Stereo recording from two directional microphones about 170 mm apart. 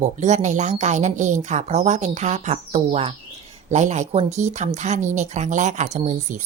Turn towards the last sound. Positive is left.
turn(degrees=-45)  # may be behind; listen again after turning